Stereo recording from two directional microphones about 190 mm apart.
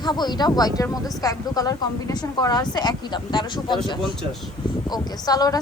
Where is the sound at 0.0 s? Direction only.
20° left (ahead or behind).